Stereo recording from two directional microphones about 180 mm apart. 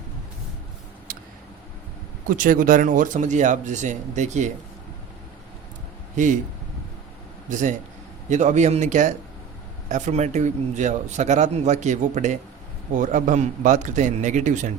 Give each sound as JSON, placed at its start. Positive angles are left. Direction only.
{"t": 2.3, "sound": "speech", "side_deg": -50}
{"t": 6.2, "sound": "speech", "side_deg": -45}
{"t": 7.5, "sound": "a man's voice", "side_deg": -45}